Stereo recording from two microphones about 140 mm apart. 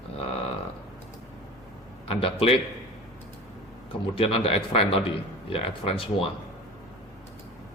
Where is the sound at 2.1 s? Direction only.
40° left (ahead or behind).